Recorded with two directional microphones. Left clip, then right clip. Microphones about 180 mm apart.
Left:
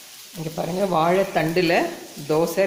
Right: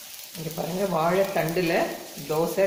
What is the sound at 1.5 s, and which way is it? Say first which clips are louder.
Speech: left 4 dB; 55° left (ahead or behind).